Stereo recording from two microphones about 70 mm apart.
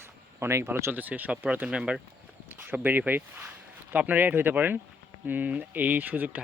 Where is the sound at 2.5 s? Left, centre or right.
Right.